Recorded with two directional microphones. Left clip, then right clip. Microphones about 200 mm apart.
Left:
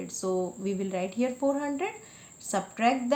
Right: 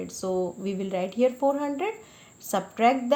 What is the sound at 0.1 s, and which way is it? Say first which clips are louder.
A woman's voice: right 1 dB; 20° right (ahead or behind).